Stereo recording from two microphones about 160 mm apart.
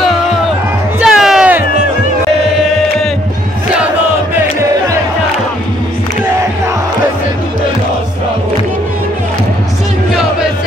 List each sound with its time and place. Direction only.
1.0 s music: 5° right (ahead or behind)
4.4 s music: 20° right (ahead or behind)